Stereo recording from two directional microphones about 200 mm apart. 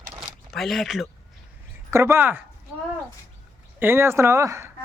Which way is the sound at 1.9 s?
15° right (ahead or behind).